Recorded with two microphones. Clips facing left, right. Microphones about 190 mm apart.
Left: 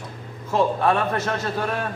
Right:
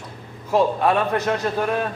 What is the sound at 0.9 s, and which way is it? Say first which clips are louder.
Speech: right 2 dB; 15° right (ahead or behind).